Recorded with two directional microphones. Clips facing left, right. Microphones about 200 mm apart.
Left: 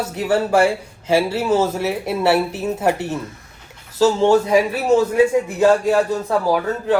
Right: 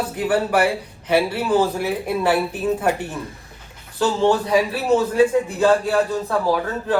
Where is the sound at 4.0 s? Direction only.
20° left (ahead or behind).